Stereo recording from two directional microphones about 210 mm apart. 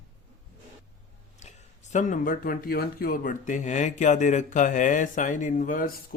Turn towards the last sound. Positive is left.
turn(degrees=40)  # may be behind; listen again after turning